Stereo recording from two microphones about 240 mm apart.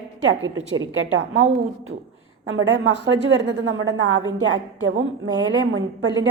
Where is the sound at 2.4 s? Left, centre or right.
Right.